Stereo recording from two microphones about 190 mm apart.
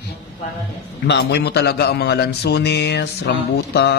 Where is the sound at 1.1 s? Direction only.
60° left (ahead or behind).